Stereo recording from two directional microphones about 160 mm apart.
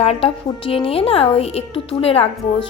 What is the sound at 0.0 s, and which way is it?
A woman's voice, 40° left (ahead or behind).